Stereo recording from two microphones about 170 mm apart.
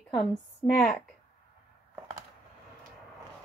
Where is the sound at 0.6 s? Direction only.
10° left (ahead or behind).